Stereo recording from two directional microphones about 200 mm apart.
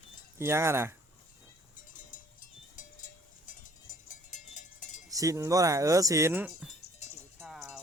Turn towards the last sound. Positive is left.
turn(degrees=0)  # may be behind; listen again after turning